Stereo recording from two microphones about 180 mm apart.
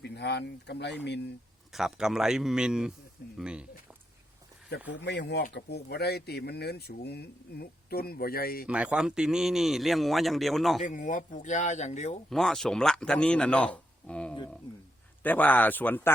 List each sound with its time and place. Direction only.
0.0 s speech: 70° left (ahead or behind)
1.7 s speech: centre (ahead or behind)
4.9 s speech: 75° left (ahead or behind); by 8.6 s 55° left (ahead or behind)
8.6 s speech: 5° right (ahead or behind)
10.8 s speech: 45° left (ahead or behind)
12.3 s speech: centre (ahead or behind)